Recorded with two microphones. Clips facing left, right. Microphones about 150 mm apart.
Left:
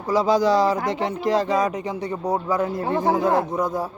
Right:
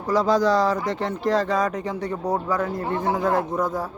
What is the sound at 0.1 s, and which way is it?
Speech, centre (ahead or behind).